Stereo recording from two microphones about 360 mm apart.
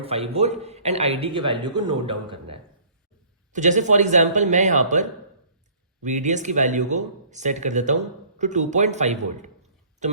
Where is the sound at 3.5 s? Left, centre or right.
Centre.